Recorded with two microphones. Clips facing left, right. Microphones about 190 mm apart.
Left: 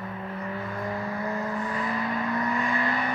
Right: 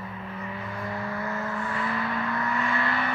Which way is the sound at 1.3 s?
20° left (ahead or behind).